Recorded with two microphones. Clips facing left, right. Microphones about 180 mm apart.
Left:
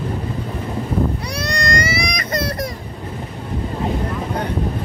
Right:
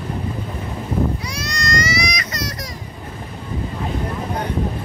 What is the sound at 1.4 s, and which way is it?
Baby cry, 60° left (ahead or behind).